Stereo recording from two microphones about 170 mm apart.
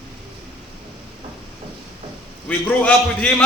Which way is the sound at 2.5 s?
5° left (ahead or behind).